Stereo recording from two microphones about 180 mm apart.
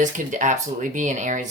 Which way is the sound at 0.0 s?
45° right (ahead or behind).